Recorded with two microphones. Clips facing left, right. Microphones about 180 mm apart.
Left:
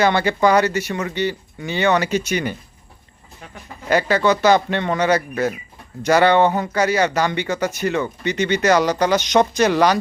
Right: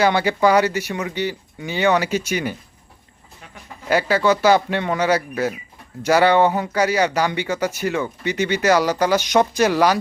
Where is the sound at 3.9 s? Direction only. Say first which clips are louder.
Left 1 dB; 10° right (ahead or behind).